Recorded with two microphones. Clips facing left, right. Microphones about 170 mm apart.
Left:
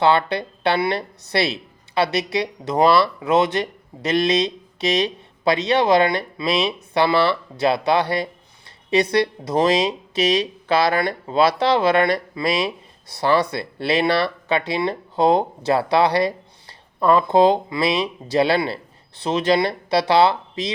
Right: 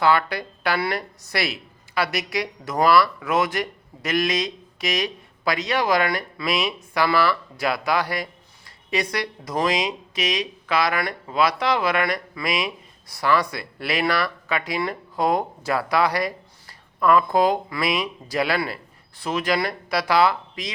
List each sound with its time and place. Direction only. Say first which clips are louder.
0.0 s speech: left 3 dB; 25° left (ahead or behind)